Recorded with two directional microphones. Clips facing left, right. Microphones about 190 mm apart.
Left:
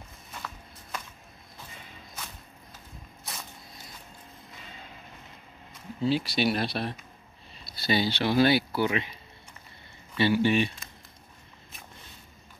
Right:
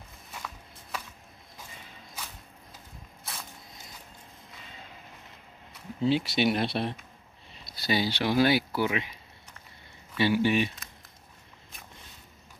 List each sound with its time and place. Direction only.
5.9 s speech: 20° right (ahead or behind)
7.6 s speech: 15° right (ahead or behind)
10.1 s speech: 10° right (ahead or behind)